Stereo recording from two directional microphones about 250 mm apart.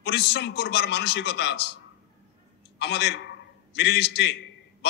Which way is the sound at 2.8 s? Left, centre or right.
Left.